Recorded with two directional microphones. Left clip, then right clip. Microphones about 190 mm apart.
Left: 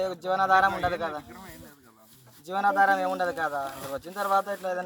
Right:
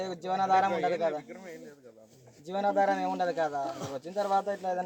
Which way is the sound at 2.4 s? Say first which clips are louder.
Left 4 dB; 15° right (ahead or behind).